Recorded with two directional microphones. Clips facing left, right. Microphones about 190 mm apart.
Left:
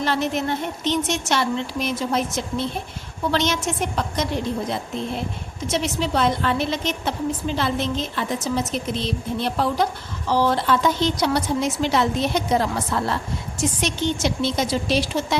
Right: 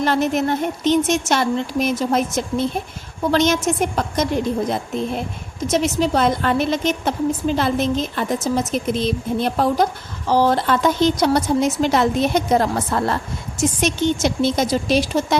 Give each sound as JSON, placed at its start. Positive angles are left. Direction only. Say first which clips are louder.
{"t": 0.0, "sound": "a woman's voice", "louder": "right 4 dB", "side_deg": -45}
{"t": 5.7, "sound": "a woman's voice", "louder": "right 5 dB", "side_deg": -45}